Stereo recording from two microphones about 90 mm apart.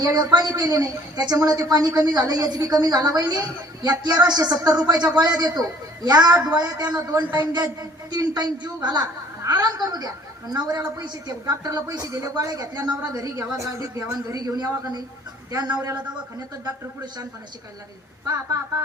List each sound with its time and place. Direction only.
0.0 s a woman's voice: 45° right (ahead or behind)